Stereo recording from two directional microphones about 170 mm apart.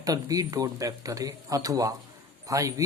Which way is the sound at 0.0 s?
20° right (ahead or behind).